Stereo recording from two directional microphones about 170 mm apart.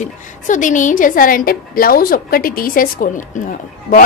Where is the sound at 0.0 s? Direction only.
50° left (ahead or behind).